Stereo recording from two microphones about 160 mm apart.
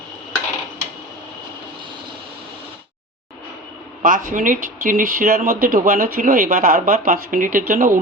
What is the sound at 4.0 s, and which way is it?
Speech, 55° right (ahead or behind).